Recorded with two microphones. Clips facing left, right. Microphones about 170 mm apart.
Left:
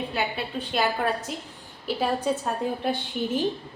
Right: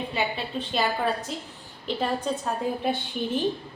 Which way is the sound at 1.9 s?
5° left (ahead or behind).